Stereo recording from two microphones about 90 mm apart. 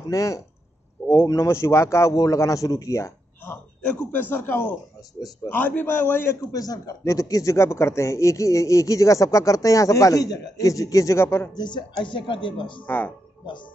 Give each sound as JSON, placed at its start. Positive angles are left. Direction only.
{"t": 0.1, "sound": "speech", "side_deg": 35}
{"t": 4.1, "sound": "a man's voice", "side_deg": 20}
{"t": 6.5, "sound": "speech", "side_deg": 40}
{"t": 11.5, "sound": "speech", "side_deg": 55}
{"t": 12.8, "sound": "a man's voice", "side_deg": 20}